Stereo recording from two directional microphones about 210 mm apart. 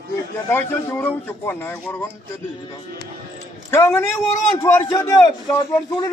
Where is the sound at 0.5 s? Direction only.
10° left (ahead or behind).